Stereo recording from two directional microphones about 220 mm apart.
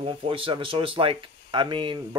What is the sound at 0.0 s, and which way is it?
Speech, 25° right (ahead or behind).